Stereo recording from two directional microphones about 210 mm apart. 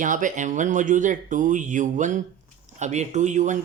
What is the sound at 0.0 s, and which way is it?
Speech, 40° right (ahead or behind).